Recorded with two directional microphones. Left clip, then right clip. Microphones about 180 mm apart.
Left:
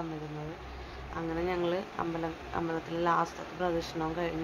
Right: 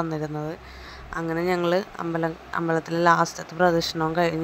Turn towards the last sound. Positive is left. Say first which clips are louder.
# right 10 dB
turn(degrees=-35)  # may be behind; listen again after turning